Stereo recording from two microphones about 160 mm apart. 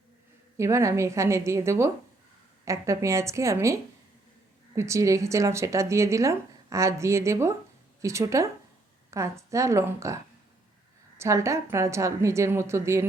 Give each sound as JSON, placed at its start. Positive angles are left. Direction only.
{"t": 0.5, "sound": "a woman's voice", "side_deg": -20}
{"t": 11.2, "sound": "a woman's voice", "side_deg": -20}